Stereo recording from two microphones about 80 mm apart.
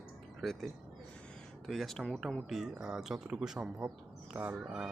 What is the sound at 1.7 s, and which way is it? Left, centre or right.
Speech, centre.